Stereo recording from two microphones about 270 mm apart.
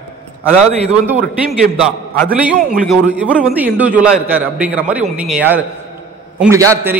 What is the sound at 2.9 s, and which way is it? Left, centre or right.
A man's voice, centre.